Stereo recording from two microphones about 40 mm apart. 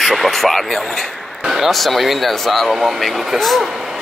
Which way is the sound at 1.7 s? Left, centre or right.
Centre.